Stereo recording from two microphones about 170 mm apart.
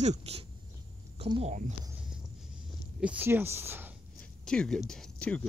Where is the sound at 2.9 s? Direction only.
5° right (ahead or behind).